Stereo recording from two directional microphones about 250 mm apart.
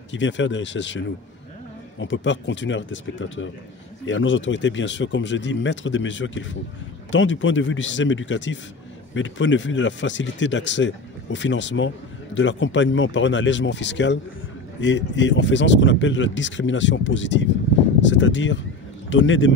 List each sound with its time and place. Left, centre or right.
0.1 s a man's voice: left